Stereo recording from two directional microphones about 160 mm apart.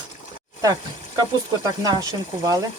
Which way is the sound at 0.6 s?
25° right (ahead or behind).